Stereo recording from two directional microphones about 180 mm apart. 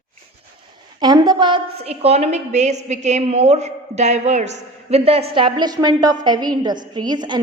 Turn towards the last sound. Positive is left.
turn(degrees=-25)  # may be behind; listen again after turning